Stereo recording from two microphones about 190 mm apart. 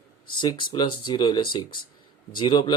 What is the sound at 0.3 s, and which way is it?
Speech, 25° left (ahead or behind).